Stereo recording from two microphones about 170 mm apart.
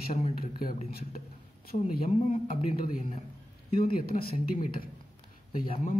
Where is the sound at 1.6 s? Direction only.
60° left (ahead or behind).